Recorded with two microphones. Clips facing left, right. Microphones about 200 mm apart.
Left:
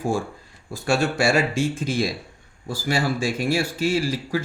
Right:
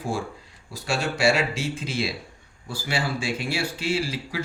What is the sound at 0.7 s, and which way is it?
Speech, 50° left (ahead or behind).